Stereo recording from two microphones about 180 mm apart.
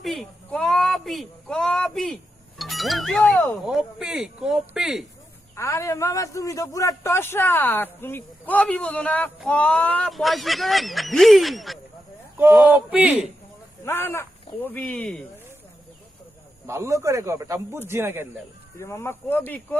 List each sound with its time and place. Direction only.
0.0 s speech: centre (ahead or behind)
5.5 s a man's voice: 15° left (ahead or behind); by 13.2 s 5° right (ahead or behind)
13.8 s a man's voice: 15° left (ahead or behind)
16.6 s a man's voice: 15° right (ahead or behind)
18.8 s a man's voice: 15° left (ahead or behind)